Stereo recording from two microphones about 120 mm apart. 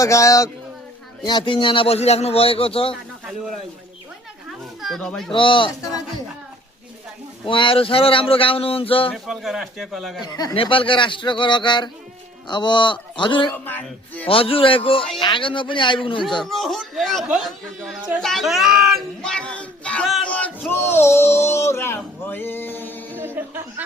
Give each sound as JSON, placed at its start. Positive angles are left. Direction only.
{"t": 0.0, "sound": "speech", "side_deg": 25}
{"t": 4.4, "sound": "speech", "side_deg": 0}
{"t": 5.3, "sound": "speech", "side_deg": 45}
{"t": 7.4, "sound": "speech", "side_deg": 45}
{"t": 9.1, "sound": "speech", "side_deg": 0}
{"t": 10.2, "sound": "speech", "side_deg": 35}
{"t": 10.5, "sound": "speech", "side_deg": 50}
{"t": 13.7, "sound": "a man's voice", "side_deg": 15}
{"t": 14.3, "sound": "speech", "side_deg": 50}
{"t": 16.4, "sound": "speech", "side_deg": 0}
{"t": 23.2, "sound": "chuckle", "side_deg": -20}